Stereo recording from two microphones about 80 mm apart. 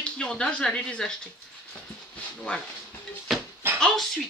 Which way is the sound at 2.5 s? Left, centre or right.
Centre.